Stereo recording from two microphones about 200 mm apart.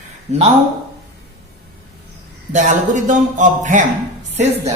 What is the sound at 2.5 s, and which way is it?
A man's voice, 40° right (ahead or behind).